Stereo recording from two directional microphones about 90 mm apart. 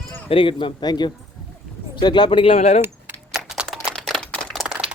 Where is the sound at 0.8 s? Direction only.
50° left (ahead or behind); by 2.6 s 75° left (ahead or behind).